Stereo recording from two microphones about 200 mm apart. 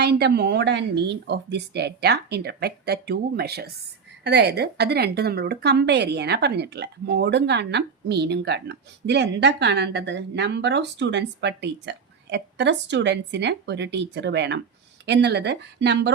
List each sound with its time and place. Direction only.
0.0 s a woman's voice: 55° right (ahead or behind)